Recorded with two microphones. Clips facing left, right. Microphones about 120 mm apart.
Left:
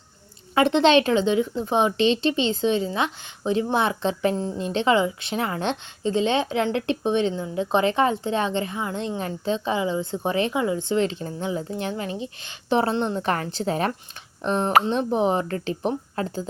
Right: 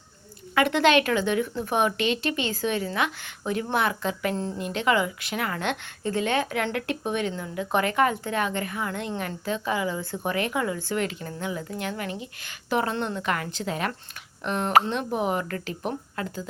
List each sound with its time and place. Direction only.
0.5 s a woman's voice: 25° left (ahead or behind)
4.4 s a woman's voice: 15° left (ahead or behind)
4.6 s a woman's voice: 30° left (ahead or behind)